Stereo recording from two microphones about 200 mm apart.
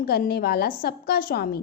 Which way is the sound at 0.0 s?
50° left (ahead or behind).